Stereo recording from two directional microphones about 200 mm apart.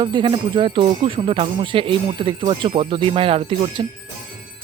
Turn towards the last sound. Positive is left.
turn(degrees=-25)  # may be behind; listen again after turning